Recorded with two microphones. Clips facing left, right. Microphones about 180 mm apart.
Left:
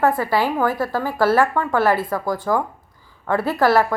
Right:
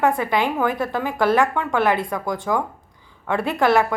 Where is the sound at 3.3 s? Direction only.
20° right (ahead or behind).